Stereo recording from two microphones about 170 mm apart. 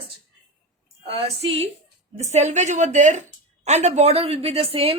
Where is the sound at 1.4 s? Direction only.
35° right (ahead or behind).